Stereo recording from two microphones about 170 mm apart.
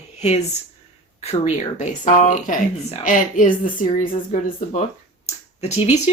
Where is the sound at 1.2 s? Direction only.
40° left (ahead or behind).